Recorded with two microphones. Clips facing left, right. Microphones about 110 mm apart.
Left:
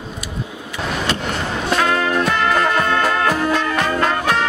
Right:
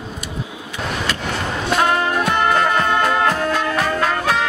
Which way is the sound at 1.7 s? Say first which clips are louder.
Right 1 dB; 20° right (ahead or behind).